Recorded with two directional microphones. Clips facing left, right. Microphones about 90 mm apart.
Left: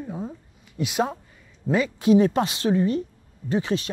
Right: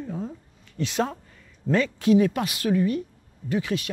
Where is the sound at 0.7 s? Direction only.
10° left (ahead or behind).